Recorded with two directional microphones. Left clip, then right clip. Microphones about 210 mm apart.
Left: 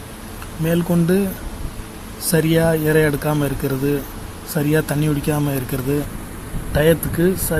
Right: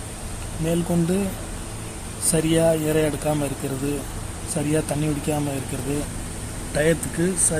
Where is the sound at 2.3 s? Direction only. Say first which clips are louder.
Left 3 dB; 10° left (ahead or behind).